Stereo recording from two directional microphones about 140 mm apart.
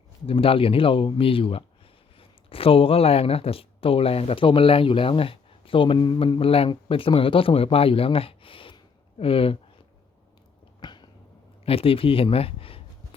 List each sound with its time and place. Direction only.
0.3 s speech: 40° left (ahead or behind)
10.8 s cat: 30° left (ahead or behind)
11.6 s speech: 40° left (ahead or behind)